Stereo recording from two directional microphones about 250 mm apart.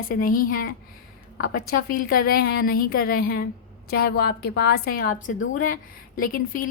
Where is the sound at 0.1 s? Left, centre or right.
Left.